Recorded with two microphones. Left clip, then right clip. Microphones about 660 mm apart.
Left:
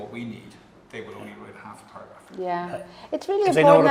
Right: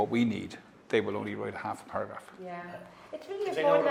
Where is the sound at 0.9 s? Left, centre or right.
Right.